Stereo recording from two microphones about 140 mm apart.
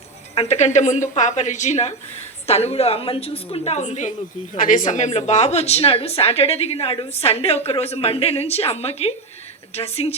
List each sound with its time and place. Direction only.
0.3 s a woman's voice: 55° left (ahead or behind)
4.5 s a woman's voice: 75° left (ahead or behind); by 10.2 s 45° left (ahead or behind)